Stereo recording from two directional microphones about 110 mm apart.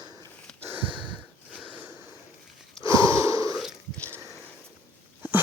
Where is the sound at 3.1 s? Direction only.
30° right (ahead or behind).